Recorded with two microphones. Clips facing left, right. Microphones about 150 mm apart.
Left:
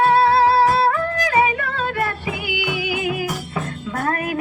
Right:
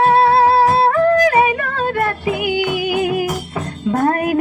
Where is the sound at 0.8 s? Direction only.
45° right (ahead or behind).